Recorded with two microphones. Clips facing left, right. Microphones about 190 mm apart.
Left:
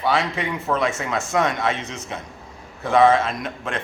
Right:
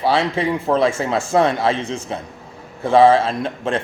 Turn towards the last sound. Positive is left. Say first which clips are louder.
# right 6 dB
turn(degrees=-30)  # may be behind; listen again after turning